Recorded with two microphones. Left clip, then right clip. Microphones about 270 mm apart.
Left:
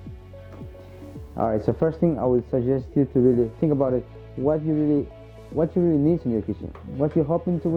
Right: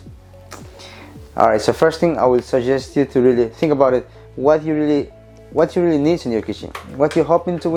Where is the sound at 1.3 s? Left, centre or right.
Centre.